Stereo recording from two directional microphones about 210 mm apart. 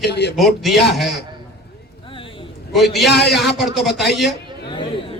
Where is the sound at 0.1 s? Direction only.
50° left (ahead or behind).